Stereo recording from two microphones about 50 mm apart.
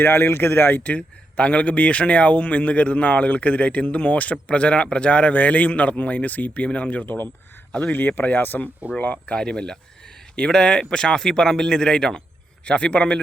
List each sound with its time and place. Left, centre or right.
0.0 s speech: left
0.8 s speech: left
7.0 s speech: left
9.2 s speech: centre